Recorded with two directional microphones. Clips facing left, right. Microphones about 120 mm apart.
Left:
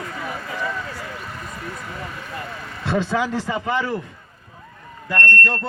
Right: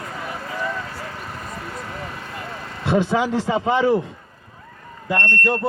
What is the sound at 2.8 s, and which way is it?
A man's voice, 15° right (ahead or behind).